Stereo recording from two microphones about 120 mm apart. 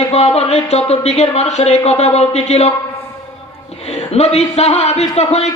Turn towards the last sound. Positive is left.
turn(degrees=65)  # may be behind; listen again after turning